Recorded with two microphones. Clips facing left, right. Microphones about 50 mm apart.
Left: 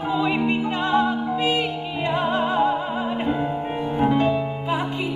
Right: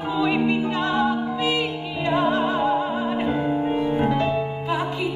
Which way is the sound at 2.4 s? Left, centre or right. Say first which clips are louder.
Even; centre.